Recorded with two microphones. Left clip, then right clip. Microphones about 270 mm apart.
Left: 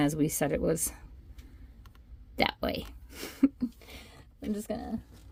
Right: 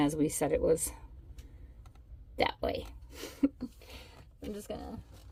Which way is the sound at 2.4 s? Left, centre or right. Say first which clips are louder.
Left 2 dB; left.